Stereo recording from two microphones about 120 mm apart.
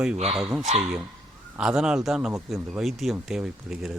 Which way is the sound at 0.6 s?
70° right (ahead or behind).